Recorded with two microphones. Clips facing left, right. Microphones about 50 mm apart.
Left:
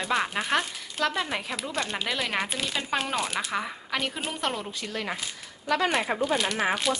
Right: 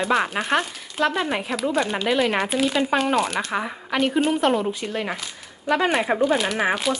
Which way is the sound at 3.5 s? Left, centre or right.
Centre.